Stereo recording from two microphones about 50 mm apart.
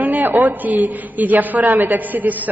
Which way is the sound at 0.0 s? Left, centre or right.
Right.